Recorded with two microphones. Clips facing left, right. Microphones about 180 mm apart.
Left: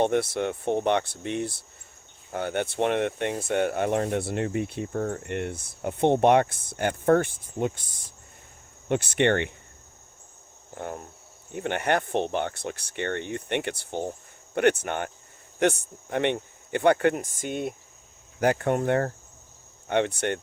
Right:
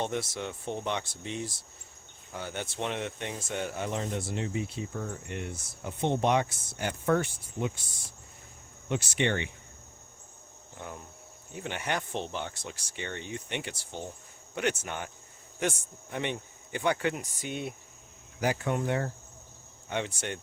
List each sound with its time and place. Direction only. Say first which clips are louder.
0.0 s speech: left 9 dB; 60° left (ahead or behind)
8.9 s speech: left 7 dB; 55° left (ahead or behind)
10.8 s speech: left 7 dB; 55° left (ahead or behind)